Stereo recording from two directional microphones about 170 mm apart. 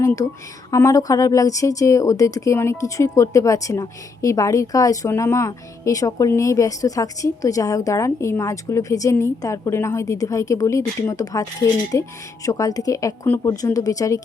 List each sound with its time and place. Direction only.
0.7 s a woman's voice: 15° left (ahead or behind)